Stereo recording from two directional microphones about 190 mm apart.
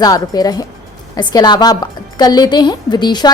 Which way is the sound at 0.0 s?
20° left (ahead or behind).